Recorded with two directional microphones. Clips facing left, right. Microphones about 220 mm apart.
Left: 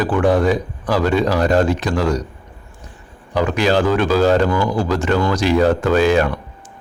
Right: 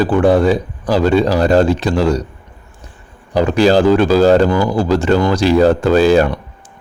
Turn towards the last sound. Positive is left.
turn(degrees=-35)  # may be behind; listen again after turning